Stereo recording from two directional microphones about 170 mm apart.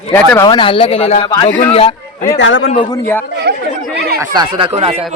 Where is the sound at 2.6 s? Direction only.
40° left (ahead or behind).